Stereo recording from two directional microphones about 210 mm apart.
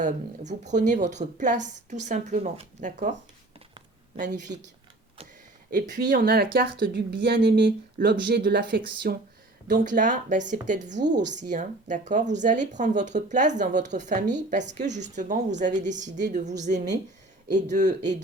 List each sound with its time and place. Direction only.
0.0 s a woman's voice: 35° right (ahead or behind)
4.2 s a woman's voice: 35° right (ahead or behind)
5.7 s a woman's voice: 40° right (ahead or behind)